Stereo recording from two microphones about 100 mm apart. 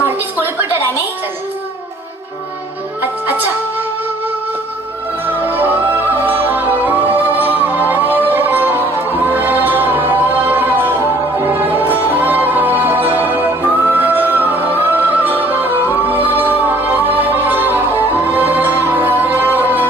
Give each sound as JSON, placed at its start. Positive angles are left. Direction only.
{"t": 0.0, "sound": "a sound", "side_deg": -20}
{"t": 3.0, "sound": "music", "side_deg": -20}
{"t": 5.2, "sound": "music", "side_deg": -20}